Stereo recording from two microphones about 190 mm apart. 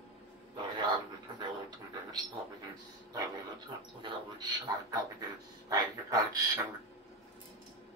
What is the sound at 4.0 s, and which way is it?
Speech, 25° right (ahead or behind).